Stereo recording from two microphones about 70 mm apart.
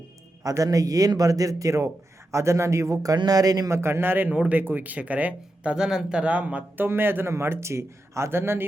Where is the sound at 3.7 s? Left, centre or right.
Right.